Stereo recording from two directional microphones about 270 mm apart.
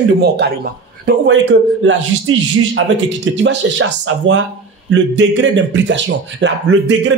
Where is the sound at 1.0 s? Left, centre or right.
Right.